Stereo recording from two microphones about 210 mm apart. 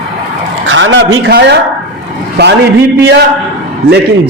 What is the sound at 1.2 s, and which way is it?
Speech, 55° right (ahead or behind).